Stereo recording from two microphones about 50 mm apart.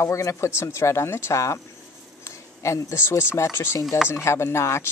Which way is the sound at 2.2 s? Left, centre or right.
Left.